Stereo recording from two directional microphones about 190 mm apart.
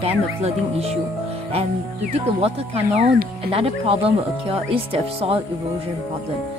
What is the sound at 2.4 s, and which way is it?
Speech, 35° right (ahead or behind).